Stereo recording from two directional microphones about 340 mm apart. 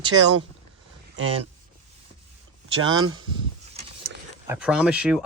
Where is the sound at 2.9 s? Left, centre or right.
Right.